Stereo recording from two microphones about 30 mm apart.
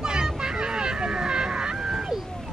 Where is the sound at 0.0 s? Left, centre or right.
Right.